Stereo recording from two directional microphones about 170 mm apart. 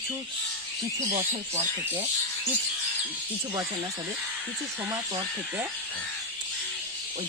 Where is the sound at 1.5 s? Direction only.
15° right (ahead or behind).